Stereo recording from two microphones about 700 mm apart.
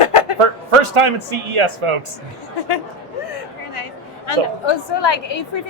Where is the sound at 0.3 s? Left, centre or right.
Right.